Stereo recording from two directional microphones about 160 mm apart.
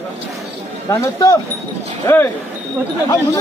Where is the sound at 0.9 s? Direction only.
20° left (ahead or behind).